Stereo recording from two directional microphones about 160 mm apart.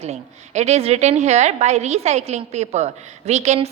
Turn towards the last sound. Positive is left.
turn(degrees=-45)  # may be behind; listen again after turning